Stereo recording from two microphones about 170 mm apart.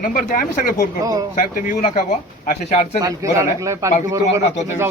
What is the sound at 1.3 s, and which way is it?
Speech, 50° left (ahead or behind).